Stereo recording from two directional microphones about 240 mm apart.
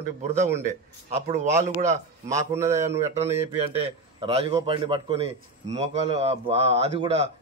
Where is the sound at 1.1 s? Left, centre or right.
Right.